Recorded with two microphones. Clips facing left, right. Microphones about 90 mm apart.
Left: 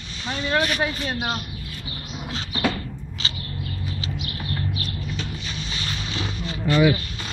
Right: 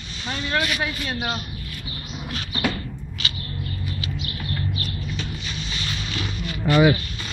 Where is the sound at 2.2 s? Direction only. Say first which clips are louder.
Left 1 dB; 25° left (ahead or behind).